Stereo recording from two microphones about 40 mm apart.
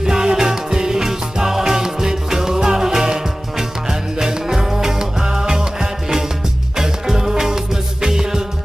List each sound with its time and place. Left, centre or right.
0.0 s music: centre